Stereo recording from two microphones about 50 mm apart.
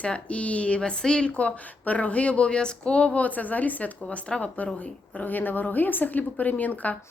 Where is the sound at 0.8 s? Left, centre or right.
Centre; by 6.9 s left.